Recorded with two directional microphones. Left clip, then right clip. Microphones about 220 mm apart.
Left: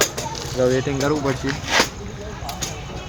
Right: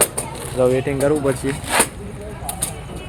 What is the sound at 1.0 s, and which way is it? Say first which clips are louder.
Speech: right 3 dB; 10° right (ahead or behind).